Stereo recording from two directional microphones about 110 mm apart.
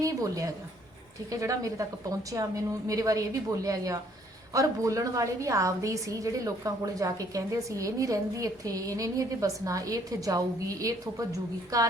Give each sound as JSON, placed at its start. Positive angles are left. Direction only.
{"t": 0.0, "sound": "a woman's voice", "side_deg": -30}